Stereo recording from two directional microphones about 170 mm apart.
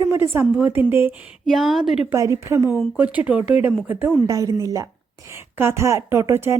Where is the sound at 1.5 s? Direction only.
Centre (ahead or behind).